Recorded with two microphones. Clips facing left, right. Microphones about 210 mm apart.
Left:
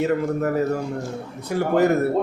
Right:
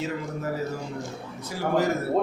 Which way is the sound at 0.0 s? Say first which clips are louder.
Left 9 dB; 60° left (ahead or behind).